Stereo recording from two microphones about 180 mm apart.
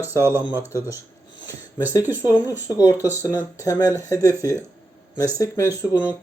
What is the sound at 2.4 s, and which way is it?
Speech, 20° left (ahead or behind).